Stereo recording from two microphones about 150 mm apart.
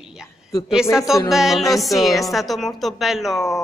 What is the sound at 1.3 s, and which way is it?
A woman's voice, centre (ahead or behind).